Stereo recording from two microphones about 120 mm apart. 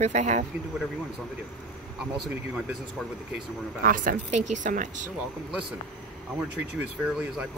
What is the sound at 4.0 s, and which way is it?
Speech, 90° right.